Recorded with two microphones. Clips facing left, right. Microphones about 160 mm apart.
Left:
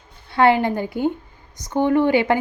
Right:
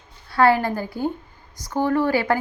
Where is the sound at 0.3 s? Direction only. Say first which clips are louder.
Left 1 dB; 20° left (ahead or behind).